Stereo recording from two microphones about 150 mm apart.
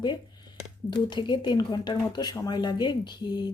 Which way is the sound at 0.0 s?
30° left (ahead or behind).